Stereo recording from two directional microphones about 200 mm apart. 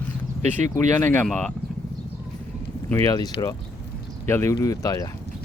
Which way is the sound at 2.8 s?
15° left (ahead or behind).